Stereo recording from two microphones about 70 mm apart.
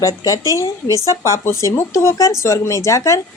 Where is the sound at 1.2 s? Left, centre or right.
Left.